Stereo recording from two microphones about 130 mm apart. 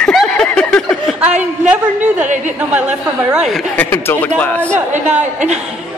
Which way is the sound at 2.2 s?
70° right (ahead or behind).